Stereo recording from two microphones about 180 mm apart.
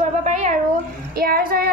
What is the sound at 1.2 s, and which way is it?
Speech, 55° right (ahead or behind).